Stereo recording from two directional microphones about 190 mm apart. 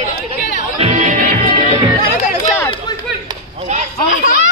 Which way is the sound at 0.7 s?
35° right (ahead or behind).